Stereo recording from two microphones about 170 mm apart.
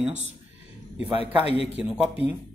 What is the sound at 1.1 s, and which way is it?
Speech, 35° left (ahead or behind).